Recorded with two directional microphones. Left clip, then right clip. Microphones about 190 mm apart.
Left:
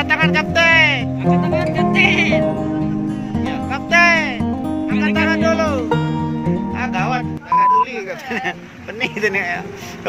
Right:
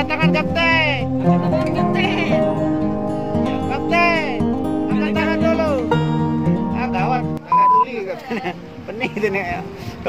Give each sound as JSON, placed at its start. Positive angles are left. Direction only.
{"t": 0.0, "sound": "music", "side_deg": 0}
{"t": 2.0, "sound": "music", "side_deg": -35}
{"t": 3.4, "sound": "music", "side_deg": 0}
{"t": 9.0, "sound": "speech", "side_deg": -5}